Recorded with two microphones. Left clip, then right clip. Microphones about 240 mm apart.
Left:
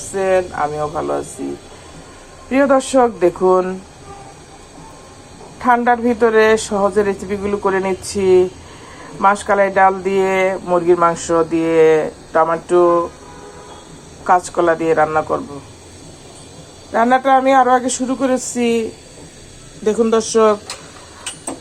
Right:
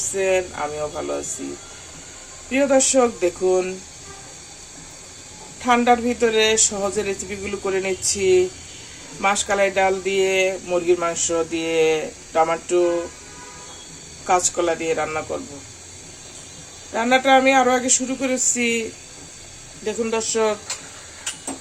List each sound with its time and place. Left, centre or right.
0.2 s speech: centre
2.5 s speech: centre
5.6 s speech: centre
10.0 s speech: left
10.2 s speech: centre
14.3 s speech: centre
16.9 s speech: centre